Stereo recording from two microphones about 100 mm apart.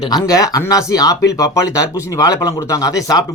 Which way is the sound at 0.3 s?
35° left (ahead or behind).